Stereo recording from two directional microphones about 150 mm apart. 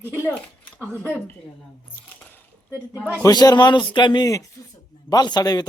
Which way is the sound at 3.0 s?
20° left (ahead or behind).